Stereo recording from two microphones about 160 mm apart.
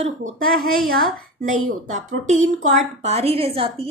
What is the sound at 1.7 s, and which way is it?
A woman's voice, 50° right (ahead or behind).